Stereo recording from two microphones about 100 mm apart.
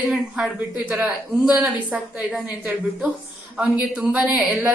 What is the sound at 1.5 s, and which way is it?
A woman's voice, 15° right (ahead or behind).